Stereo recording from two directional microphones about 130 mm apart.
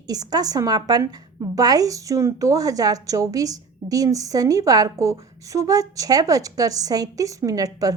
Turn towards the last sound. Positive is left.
turn(degrees=-30)  # may be behind; listen again after turning